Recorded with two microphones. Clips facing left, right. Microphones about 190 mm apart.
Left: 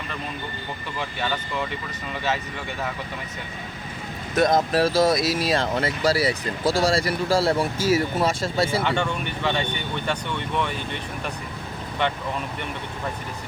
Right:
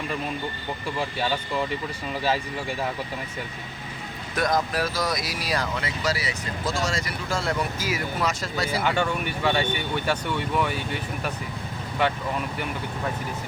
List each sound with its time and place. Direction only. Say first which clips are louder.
4.4 s speech: left 5 dB; 25° left (ahead or behind)
8.8 s speech: even; 5° right (ahead or behind)